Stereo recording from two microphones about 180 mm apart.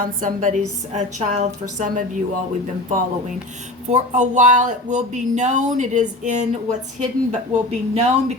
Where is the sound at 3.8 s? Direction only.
40° right (ahead or behind).